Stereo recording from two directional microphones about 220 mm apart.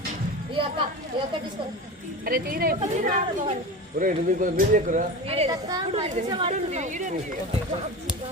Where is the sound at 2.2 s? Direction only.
40° right (ahead or behind); by 6.5 s 20° right (ahead or behind).